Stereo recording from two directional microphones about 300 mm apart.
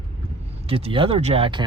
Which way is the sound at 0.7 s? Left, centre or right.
Centre.